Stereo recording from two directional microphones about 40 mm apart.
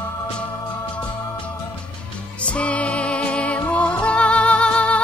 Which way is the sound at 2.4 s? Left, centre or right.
Left.